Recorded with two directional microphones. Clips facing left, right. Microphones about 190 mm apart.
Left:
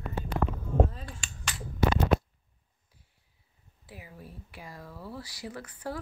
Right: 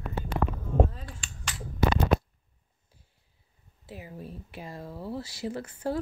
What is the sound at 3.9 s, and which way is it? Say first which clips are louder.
Speech: right 6 dB; 25° right (ahead or behind).